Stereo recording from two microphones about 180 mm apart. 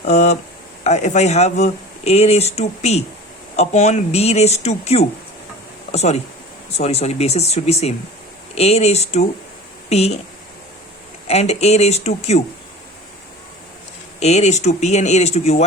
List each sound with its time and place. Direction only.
0.0 s speech: 40° left (ahead or behind)
11.3 s speech: 35° left (ahead or behind)
14.2 s speech: 40° left (ahead or behind)